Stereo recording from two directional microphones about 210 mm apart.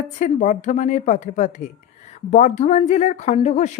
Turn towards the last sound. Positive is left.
turn(degrees=35)  # may be behind; listen again after turning